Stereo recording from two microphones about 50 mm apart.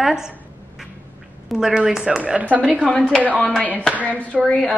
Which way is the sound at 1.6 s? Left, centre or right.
Centre.